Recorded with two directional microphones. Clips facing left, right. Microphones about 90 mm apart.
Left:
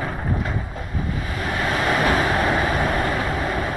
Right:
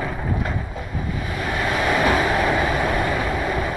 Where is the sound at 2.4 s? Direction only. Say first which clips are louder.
Even; 25° left (ahead or behind).